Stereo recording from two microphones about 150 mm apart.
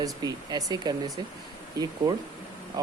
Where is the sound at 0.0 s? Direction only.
25° right (ahead or behind).